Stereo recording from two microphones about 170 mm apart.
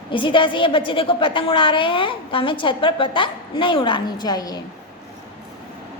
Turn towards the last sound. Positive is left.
turn(degrees=25)  # may be behind; listen again after turning